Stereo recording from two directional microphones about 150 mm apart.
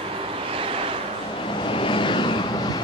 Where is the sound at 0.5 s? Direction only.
40° right (ahead or behind).